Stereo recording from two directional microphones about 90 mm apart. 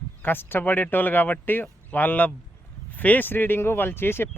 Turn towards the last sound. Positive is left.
turn(degrees=25)  # may be behind; listen again after turning